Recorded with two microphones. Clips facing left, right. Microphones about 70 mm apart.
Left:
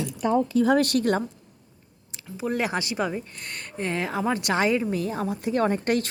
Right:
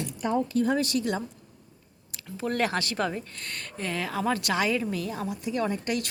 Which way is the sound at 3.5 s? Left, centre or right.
Left.